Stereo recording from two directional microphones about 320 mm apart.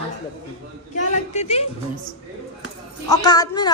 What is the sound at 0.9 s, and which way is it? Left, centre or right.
Speech, left.